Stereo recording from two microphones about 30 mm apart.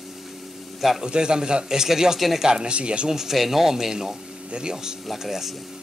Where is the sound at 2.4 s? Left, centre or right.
Right.